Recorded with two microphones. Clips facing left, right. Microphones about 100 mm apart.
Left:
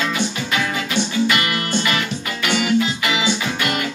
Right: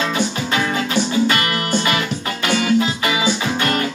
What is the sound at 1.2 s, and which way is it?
Music, 35° right (ahead or behind).